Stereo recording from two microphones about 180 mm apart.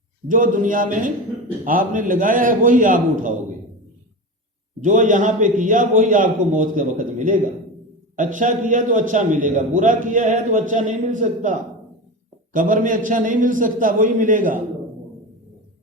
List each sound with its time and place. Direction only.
0.3 s a man's voice: 50° right (ahead or behind)
4.8 s a man's voice: 45° right (ahead or behind)